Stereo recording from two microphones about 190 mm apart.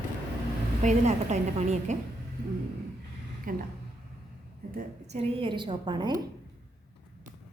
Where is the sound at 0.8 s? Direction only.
40° right (ahead or behind).